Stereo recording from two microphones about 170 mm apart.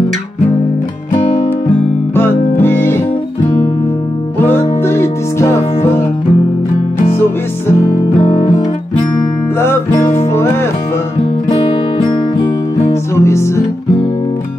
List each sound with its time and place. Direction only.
2.1 s music: 15° left (ahead or behind)
4.5 s music: 15° left (ahead or behind)
8.2 s music: 30° left (ahead or behind)
9.6 s music: 15° left (ahead or behind)
11.4 s music: 35° left (ahead or behind)
13.1 s music: 15° left (ahead or behind)